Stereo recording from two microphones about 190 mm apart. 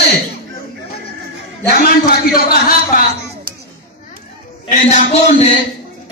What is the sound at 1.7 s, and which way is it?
A man's voice, 50° left (ahead or behind).